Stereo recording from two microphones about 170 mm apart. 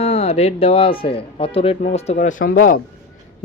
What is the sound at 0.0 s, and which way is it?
Speech, 35° left (ahead or behind).